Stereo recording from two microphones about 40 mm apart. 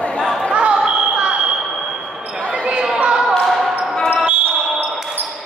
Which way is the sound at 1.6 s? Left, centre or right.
Centre.